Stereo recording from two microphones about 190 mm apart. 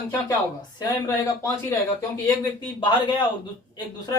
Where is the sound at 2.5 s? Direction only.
25° left (ahead or behind).